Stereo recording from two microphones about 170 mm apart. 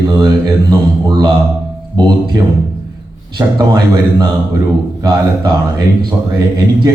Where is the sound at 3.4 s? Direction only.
25° right (ahead or behind).